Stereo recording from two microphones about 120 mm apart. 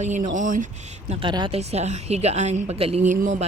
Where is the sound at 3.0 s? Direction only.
85° right.